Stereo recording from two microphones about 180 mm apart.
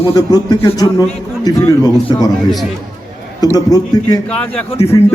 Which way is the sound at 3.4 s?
20° left (ahead or behind).